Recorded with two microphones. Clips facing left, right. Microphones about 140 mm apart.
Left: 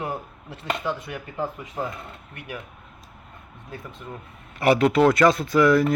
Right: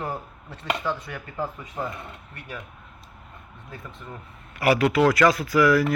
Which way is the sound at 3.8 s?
15° left (ahead or behind).